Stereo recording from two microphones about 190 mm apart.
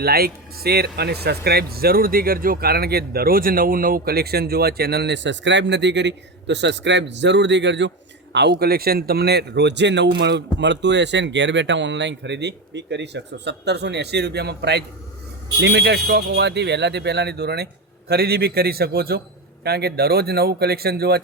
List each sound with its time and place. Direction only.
0.0 s speech: 55° right (ahead or behind)